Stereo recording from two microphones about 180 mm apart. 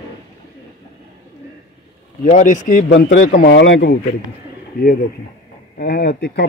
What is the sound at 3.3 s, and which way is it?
Speech, 60° left (ahead or behind).